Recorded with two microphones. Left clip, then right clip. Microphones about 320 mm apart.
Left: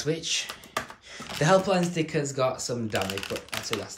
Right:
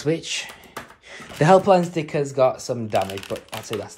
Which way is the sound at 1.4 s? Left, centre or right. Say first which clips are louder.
Right 7 dB; centre.